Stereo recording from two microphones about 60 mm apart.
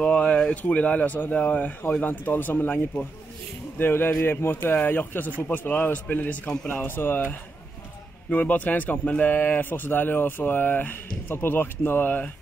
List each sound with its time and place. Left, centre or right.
0.0 s a sound: centre
0.6 s a man's voice: left
2.0 s a man's voice: left